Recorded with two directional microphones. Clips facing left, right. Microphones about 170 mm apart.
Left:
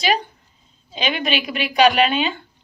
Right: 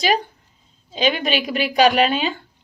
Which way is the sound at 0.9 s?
40° right (ahead or behind).